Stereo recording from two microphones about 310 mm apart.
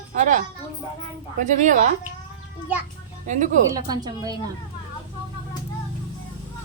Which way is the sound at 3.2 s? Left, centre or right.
Right.